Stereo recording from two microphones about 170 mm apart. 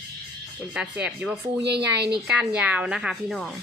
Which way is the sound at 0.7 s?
5° right (ahead or behind).